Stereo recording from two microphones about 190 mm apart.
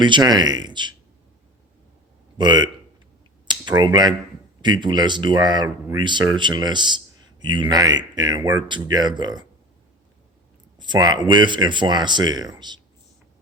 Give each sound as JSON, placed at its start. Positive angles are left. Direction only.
{"t": 0.0, "sound": "speech", "side_deg": -20}
{"t": 2.4, "sound": "speech", "side_deg": -20}
{"t": 10.8, "sound": "speech", "side_deg": -20}